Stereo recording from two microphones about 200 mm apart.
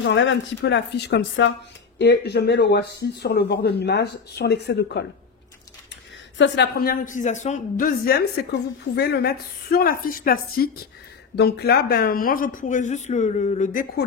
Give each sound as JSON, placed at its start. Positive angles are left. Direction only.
{"t": 0.0, "sound": "speech", "side_deg": 65}
{"t": 6.3, "sound": "speech", "side_deg": 60}